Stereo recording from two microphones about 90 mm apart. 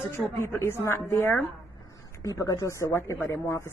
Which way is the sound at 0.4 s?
30° left (ahead or behind).